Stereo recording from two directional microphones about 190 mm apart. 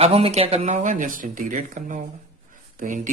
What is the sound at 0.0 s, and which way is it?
Speech, 35° right (ahead or behind).